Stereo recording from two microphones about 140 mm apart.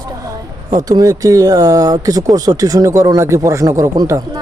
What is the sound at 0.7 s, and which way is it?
A man's voice, 25° right (ahead or behind).